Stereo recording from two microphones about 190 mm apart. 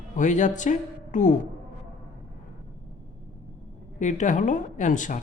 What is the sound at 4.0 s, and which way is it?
Speech, 40° left (ahead or behind).